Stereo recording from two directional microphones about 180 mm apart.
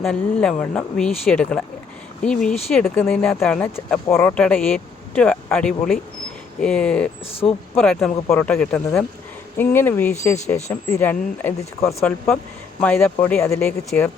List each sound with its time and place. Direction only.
0.0 s speech: 5° left (ahead or behind)
12.0 s speech: 5° left (ahead or behind)